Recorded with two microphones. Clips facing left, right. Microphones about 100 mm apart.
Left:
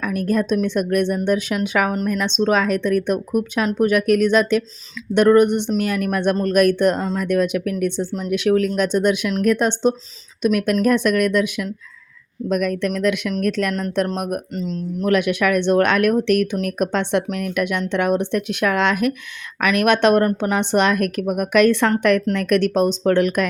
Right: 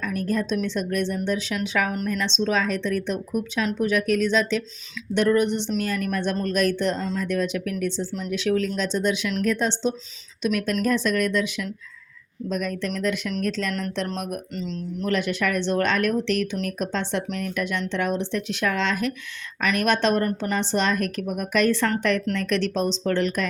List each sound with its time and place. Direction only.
0.0 s speech: 60° left (ahead or behind)
12.5 s speech: 65° left (ahead or behind)
14.5 s speech: 40° left (ahead or behind)
15.1 s speech: 60° left (ahead or behind)